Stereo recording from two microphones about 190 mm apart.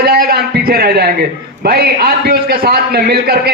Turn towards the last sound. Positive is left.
turn(degrees=-55)  # may be behind; listen again after turning